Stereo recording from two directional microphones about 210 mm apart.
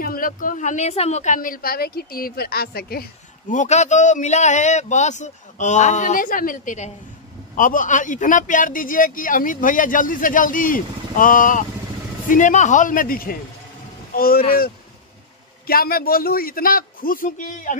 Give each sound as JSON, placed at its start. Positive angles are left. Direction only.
{"t": 0.0, "sound": "a woman's voice", "side_deg": 45}
{"t": 15.6, "sound": "a man's voice", "side_deg": 45}